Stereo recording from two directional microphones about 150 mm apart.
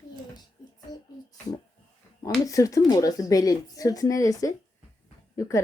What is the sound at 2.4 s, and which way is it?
Speech, 20° left (ahead or behind).